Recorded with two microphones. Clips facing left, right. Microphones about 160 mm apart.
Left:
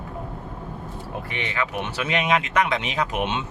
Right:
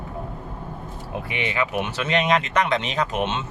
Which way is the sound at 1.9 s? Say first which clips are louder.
Right 1 dB; 10° left (ahead or behind).